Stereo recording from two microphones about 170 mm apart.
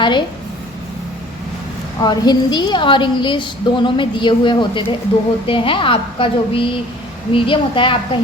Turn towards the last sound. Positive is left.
turn(degrees=30)  # may be behind; listen again after turning